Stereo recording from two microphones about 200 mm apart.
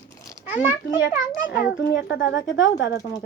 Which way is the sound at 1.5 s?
60° left (ahead or behind).